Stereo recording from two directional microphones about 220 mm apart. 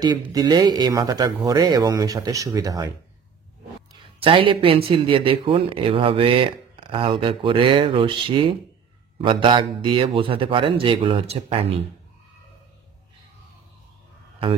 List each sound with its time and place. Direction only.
0.0 s speech: 20° right (ahead or behind)
3.9 s speech: 25° right (ahead or behind)